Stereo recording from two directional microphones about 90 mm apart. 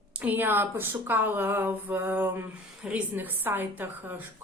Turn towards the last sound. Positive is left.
turn(degrees=-20)  # may be behind; listen again after turning